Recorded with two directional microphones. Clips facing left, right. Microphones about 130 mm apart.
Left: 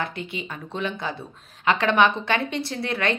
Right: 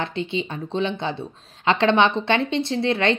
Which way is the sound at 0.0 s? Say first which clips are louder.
Right 5 dB; 25° right (ahead or behind).